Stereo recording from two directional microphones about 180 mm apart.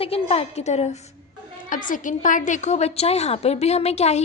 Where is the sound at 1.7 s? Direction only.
45° left (ahead or behind).